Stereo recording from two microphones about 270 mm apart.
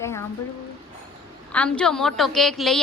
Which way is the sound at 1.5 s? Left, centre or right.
Centre.